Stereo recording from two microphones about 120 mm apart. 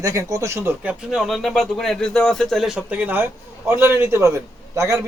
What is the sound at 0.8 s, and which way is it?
A man's voice, 5° right (ahead or behind).